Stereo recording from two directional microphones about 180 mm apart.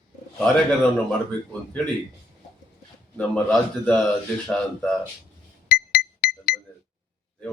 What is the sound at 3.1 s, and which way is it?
A man's voice, 5° left (ahead or behind).